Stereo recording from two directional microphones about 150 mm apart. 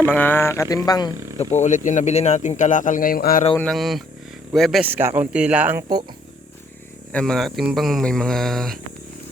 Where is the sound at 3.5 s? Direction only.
10° left (ahead or behind).